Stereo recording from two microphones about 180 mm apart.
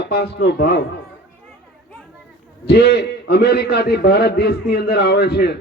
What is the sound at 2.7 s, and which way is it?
A man's voice, 65° left (ahead or behind).